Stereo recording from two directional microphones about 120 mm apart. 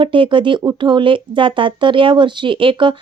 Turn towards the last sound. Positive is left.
turn(degrees=-45)  # may be behind; listen again after turning